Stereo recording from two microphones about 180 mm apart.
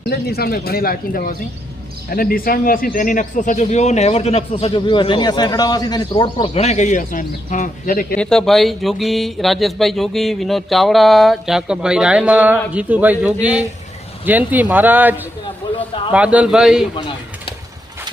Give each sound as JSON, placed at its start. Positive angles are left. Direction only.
{"t": 0.1, "sound": "a man's voice", "side_deg": 60}
{"t": 8.1, "sound": "speech", "side_deg": 5}
{"t": 15.6, "sound": "a sound", "side_deg": 25}
{"t": 16.1, "sound": "speech", "side_deg": -5}